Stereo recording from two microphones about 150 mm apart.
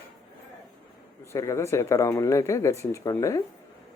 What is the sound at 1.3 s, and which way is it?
Speech, 20° left (ahead or behind).